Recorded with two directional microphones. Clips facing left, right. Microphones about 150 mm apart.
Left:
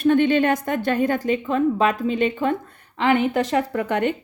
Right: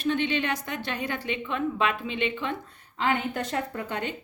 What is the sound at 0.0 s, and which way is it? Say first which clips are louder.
Speech: left 10 dB; 50° left (ahead or behind).